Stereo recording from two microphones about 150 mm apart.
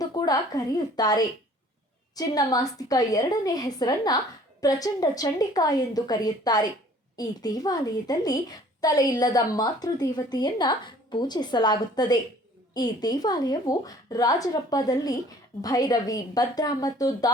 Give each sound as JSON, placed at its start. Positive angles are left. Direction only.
{"t": 0.0, "sound": "a woman's voice", "side_deg": 25}